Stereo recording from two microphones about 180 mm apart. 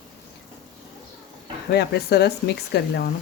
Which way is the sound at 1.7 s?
65° left (ahead or behind).